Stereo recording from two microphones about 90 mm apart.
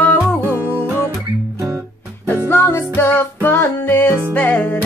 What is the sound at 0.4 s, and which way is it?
Music, 25° right (ahead or behind).